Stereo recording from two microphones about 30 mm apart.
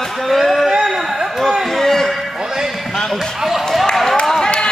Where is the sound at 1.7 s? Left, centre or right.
Centre.